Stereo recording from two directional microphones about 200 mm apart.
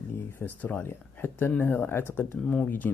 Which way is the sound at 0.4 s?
10° left (ahead or behind).